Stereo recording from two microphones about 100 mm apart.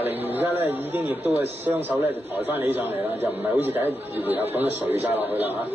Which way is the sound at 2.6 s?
20° right (ahead or behind).